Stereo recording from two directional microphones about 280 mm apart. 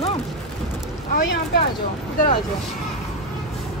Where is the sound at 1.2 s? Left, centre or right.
Left.